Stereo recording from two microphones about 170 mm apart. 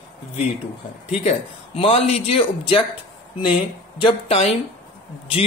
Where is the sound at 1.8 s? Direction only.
35° left (ahead or behind).